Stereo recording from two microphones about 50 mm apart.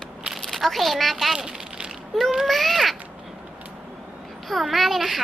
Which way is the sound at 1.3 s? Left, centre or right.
Centre.